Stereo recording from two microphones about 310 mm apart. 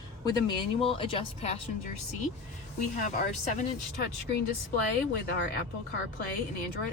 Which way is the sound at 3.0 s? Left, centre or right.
Left.